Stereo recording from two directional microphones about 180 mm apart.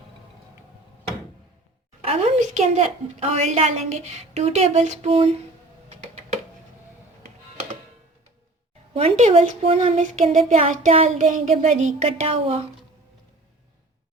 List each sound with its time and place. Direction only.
2.0 s a woman's voice: 40° right (ahead or behind)
5.9 s a sound: 40° right (ahead or behind)
7.2 s music: 40° right (ahead or behind)
8.9 s a woman's voice: 35° right (ahead or behind)